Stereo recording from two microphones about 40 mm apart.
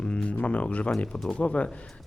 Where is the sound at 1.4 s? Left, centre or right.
Left.